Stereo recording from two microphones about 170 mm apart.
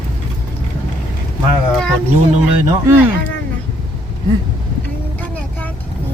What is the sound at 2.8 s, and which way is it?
Speech, 15° right (ahead or behind).